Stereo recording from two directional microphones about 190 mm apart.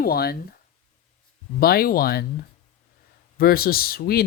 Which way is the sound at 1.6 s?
55° left (ahead or behind).